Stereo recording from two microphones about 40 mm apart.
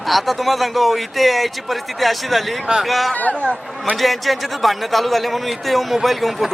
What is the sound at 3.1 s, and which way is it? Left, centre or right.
Speech, left.